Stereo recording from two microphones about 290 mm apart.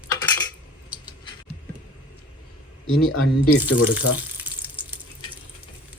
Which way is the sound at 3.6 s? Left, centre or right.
Centre.